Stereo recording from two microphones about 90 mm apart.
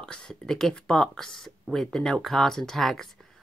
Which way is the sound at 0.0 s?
10° left (ahead or behind).